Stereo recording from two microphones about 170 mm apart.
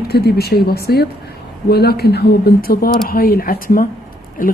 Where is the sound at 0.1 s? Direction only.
70° left (ahead or behind).